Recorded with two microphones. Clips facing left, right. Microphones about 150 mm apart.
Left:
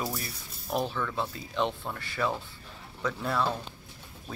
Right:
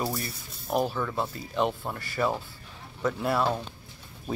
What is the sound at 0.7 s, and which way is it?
Speech, 10° right (ahead or behind).